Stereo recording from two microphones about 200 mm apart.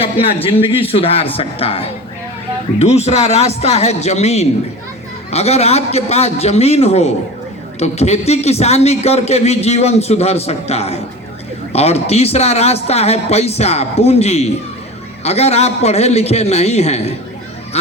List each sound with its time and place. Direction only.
0.0 s a man's voice: 30° left (ahead or behind)